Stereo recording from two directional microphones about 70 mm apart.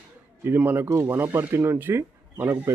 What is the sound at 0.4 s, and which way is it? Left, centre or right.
Speech, right.